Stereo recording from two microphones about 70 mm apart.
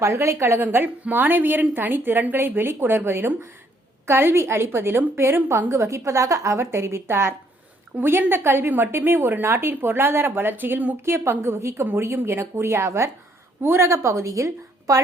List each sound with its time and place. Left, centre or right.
0.0 s a woman's voice: right
0.6 s a woman's voice: right
11.0 s a woman's voice: right